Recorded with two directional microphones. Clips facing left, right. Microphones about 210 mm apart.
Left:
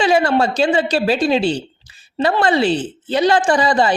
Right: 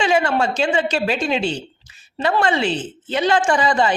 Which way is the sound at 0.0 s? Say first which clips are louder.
Left 3 dB; 35° left (ahead or behind).